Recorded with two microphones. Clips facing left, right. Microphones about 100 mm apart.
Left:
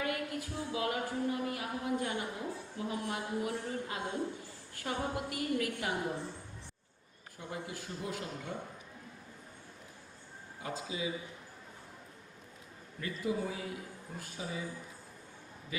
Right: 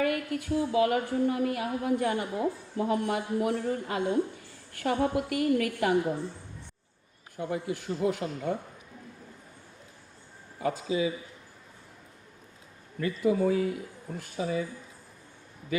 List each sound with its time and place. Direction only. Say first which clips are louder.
0.0 s a woman's voice: right 7 dB; 65° right (ahead or behind)
7.3 s a woman's voice: right 10 dB; 65° right (ahead or behind)
10.6 s speech: right 10 dB; 70° right (ahead or behind)
13.0 s a woman's voice: right 9 dB; 65° right (ahead or behind)